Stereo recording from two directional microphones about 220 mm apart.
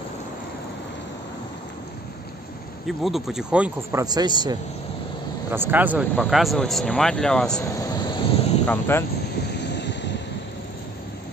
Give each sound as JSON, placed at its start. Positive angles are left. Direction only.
{"t": 2.9, "sound": "speech", "side_deg": 0}
{"t": 4.0, "sound": "speech", "side_deg": -20}
{"t": 7.6, "sound": "vehicle", "side_deg": 15}
{"t": 8.6, "sound": "speech", "side_deg": 10}
{"t": 9.6, "sound": "vehicle", "side_deg": 50}